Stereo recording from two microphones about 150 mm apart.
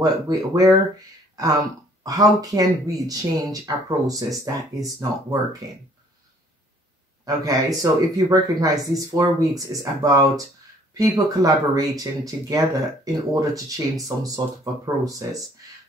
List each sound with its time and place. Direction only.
0.0 s speech: 25° right (ahead or behind)
7.2 s speech: 25° right (ahead or behind)